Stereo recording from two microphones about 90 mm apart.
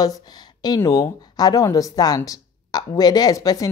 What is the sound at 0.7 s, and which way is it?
Speech, 40° left (ahead or behind).